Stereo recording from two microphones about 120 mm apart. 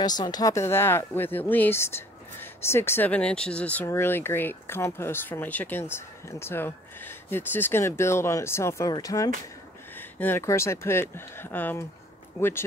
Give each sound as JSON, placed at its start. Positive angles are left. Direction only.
{"t": 0.0, "sound": "speech", "side_deg": 35}
{"t": 3.8, "sound": "speech", "side_deg": 20}
{"t": 9.9, "sound": "speech", "side_deg": 15}